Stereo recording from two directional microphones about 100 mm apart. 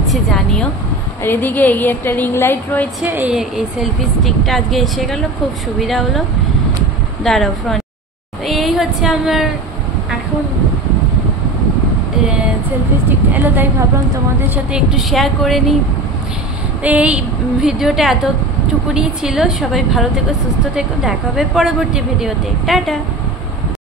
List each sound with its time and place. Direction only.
0.1 s a woman's voice: 5° left (ahead or behind)
1.2 s a woman's voice: 20° left (ahead or behind)
3.1 s speech: 20° right (ahead or behind)
3.3 s a woman's voice: 5° right (ahead or behind)
7.2 s a woman's voice: centre (ahead or behind)
13.3 s speech: 20° right (ahead or behind)
14.7 s a woman's voice: 5° right (ahead or behind)
16.8 s a woman's voice: 15° right (ahead or behind)